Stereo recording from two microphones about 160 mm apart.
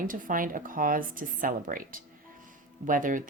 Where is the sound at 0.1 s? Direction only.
60° right (ahead or behind).